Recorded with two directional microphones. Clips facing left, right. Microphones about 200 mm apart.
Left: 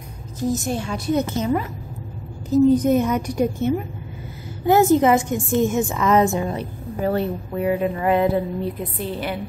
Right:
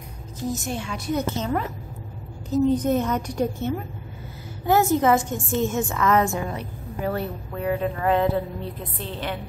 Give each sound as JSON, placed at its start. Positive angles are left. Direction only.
{"t": 0.7, "sound": "a woman's voice", "side_deg": 40}
{"t": 1.2, "sound": "a woman's voice", "side_deg": 15}
{"t": 7.5, "sound": "a woman's voice", "side_deg": 10}